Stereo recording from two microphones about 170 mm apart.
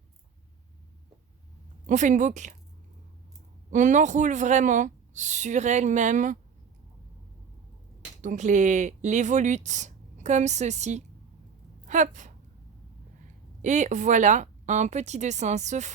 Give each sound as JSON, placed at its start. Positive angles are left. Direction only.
{"t": 1.9, "sound": "speech", "side_deg": -45}
{"t": 3.7, "sound": "speech", "side_deg": -45}
{"t": 8.2, "sound": "speech", "side_deg": -45}
{"t": 13.6, "sound": "speech", "side_deg": -45}